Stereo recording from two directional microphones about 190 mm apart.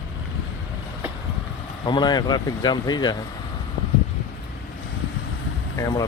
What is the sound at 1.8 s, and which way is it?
Speech, 25° left (ahead or behind).